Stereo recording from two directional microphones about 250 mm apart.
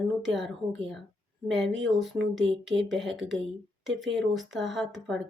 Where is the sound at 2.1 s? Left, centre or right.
Right.